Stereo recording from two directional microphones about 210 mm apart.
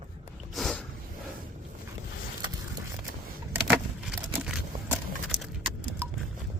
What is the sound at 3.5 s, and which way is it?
Vehicle, 5° right (ahead or behind).